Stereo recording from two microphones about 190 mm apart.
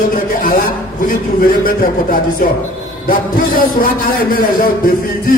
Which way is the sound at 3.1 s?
50° left (ahead or behind).